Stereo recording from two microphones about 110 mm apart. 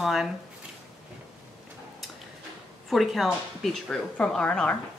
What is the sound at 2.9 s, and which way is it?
A woman's voice, centre (ahead or behind).